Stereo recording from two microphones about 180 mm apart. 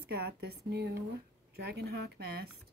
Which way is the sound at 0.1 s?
60° right (ahead or behind).